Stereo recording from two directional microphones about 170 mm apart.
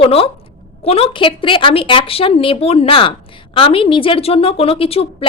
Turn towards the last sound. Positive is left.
turn(degrees=35)  # may be behind; listen again after turning